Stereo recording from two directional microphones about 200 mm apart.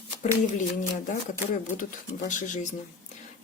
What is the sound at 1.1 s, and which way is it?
Speech, 40° left (ahead or behind).